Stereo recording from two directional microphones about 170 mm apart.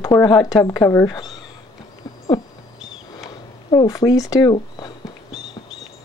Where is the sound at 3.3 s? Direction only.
20° left (ahead or behind).